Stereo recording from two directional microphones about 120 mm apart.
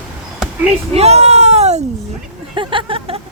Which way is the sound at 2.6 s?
45° right (ahead or behind).